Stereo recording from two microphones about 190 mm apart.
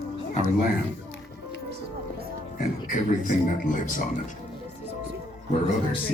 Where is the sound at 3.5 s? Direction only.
45° left (ahead or behind).